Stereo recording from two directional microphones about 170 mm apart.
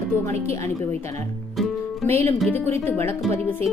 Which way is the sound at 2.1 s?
15° left (ahead or behind).